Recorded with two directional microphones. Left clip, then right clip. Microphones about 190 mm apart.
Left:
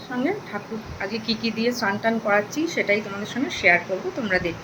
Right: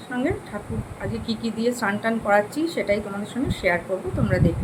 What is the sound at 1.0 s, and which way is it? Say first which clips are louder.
A woman's voice: left 4 dB; 10° right (ahead or behind).